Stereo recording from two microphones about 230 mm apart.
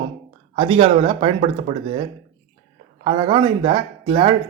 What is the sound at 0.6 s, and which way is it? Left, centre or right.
Speech, right.